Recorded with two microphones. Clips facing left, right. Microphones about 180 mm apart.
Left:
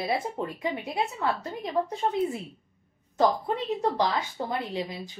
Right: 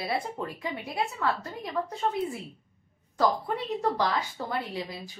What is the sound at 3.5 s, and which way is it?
A woman's voice, 20° left (ahead or behind).